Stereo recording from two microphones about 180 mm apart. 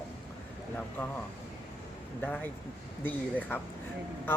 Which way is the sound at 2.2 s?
10° left (ahead or behind).